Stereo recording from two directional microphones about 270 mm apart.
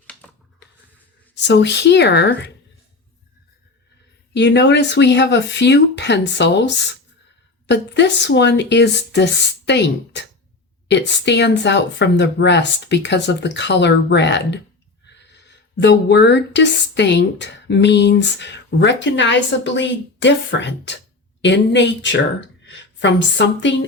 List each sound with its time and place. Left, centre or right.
1.4 s speech: left
4.4 s a woman's voice: left